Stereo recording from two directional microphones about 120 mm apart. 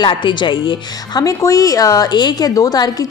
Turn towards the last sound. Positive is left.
turn(degrees=35)  # may be behind; listen again after turning